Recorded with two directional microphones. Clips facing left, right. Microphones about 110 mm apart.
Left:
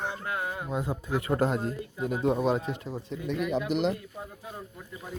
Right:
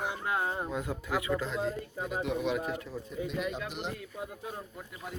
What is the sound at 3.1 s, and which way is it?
Speech, 90° left.